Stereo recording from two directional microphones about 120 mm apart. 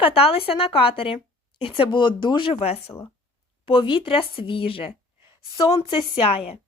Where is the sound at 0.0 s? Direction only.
50° left (ahead or behind).